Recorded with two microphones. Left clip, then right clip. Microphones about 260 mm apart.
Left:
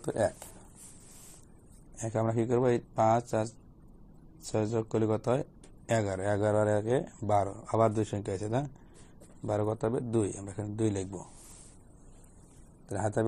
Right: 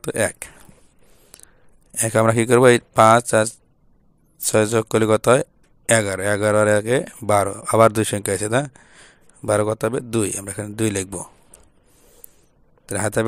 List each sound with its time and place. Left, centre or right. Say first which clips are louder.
0.0 s speech: right 8 dB; right
2.0 s speech: right 14 dB; right